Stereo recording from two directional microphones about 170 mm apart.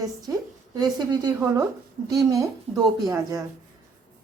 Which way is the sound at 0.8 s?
25° right (ahead or behind).